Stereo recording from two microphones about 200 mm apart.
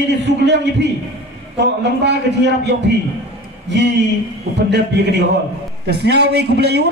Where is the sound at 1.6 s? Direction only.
60° right (ahead or behind).